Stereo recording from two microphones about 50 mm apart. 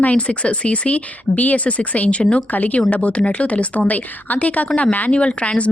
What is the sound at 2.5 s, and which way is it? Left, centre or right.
Speech, left.